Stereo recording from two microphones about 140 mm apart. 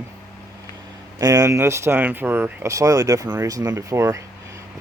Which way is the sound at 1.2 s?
25° right (ahead or behind).